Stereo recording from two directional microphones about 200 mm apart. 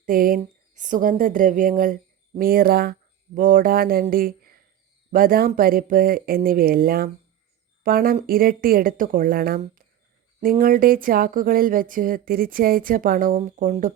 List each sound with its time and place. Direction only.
0.0 s speech: 45° right (ahead or behind)
4.1 s a sound: 45° right (ahead or behind)
5.1 s speech: 45° right (ahead or behind)